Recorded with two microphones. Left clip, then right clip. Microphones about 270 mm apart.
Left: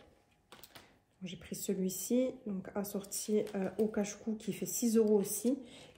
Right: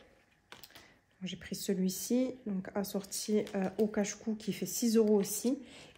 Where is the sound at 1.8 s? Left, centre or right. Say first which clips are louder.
Right 1 dB; right.